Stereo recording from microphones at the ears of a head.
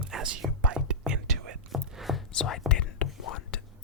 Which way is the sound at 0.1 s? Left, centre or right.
Right.